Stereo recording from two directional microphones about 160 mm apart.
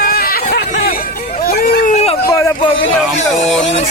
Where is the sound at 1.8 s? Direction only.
40° left (ahead or behind).